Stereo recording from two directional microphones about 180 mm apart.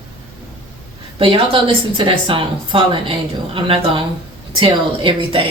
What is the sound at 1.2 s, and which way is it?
A woman's voice, 30° right (ahead or behind).